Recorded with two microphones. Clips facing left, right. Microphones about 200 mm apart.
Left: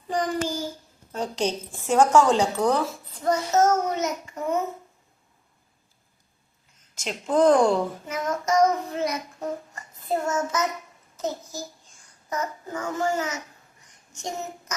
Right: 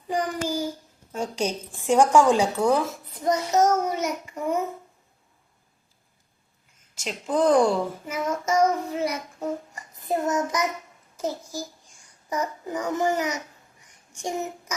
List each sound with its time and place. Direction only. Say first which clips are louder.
0.1 s child singing: even; 10° right (ahead or behind)
1.1 s a woman's voice: left 1 dB; 10° right (ahead or behind)
7.0 s a woman's voice: left 3 dB; centre (ahead or behind)
8.0 s child singing: even; 5° right (ahead or behind)
11.2 s a child's voice: right 1 dB; 10° right (ahead or behind)